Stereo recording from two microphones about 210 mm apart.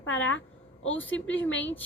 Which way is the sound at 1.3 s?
65° left (ahead or behind).